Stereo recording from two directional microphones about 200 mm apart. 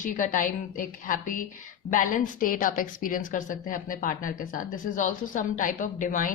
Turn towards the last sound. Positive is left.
turn(degrees=40)  # may be behind; listen again after turning